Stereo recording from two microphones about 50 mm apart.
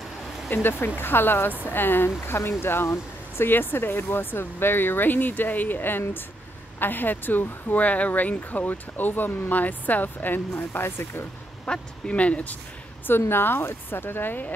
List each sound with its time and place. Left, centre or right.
0.5 s speech: left
11.6 s speech: left
13.3 s speech: left